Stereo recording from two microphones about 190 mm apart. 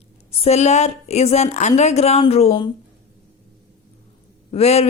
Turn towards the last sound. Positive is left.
turn(degrees=35)  # may be behind; listen again after turning